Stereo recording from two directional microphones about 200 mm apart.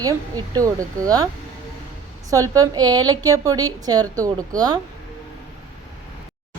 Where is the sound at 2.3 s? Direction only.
15° right (ahead or behind).